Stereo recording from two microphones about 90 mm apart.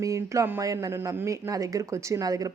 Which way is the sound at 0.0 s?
35° right (ahead or behind).